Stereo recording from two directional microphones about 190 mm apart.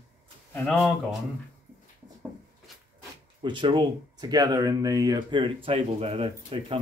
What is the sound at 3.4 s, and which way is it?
Speech, 25° right (ahead or behind).